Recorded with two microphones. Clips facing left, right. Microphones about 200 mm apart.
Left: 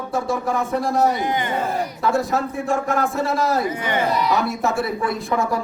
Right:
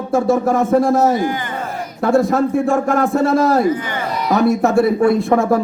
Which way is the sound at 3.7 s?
25° left (ahead or behind).